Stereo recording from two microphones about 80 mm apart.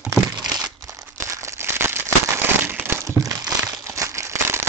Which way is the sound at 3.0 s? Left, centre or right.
Right.